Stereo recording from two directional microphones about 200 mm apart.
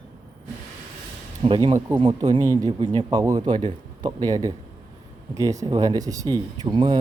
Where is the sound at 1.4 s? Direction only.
25° right (ahead or behind).